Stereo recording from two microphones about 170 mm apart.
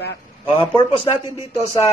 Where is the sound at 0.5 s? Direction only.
30° left (ahead or behind).